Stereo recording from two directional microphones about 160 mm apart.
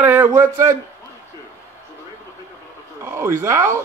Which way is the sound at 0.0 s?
10° right (ahead or behind).